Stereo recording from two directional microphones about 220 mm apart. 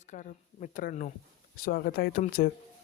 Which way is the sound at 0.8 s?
40° left (ahead or behind).